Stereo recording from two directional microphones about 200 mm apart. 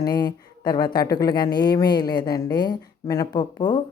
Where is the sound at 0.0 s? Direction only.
20° left (ahead or behind).